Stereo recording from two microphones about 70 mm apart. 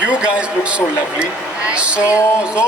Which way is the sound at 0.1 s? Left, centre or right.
Centre.